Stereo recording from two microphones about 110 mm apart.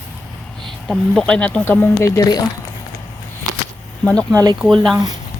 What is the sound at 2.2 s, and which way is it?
Speech, 40° left (ahead or behind).